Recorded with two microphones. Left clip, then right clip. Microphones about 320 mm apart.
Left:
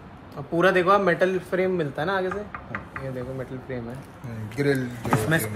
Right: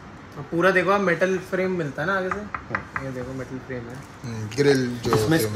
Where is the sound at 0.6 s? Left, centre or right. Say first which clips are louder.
Even; left.